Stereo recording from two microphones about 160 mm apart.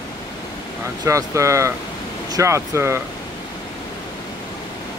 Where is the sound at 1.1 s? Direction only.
20° right (ahead or behind).